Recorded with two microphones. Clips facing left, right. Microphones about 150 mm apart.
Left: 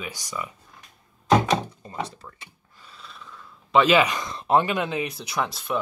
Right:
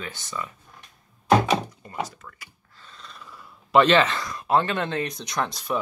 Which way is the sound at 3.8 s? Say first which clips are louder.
Even; 10° left (ahead or behind).